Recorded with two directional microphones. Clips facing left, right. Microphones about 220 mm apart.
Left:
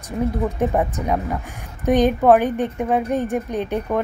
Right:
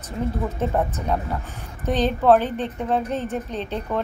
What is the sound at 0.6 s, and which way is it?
A woman's voice, 15° left (ahead or behind).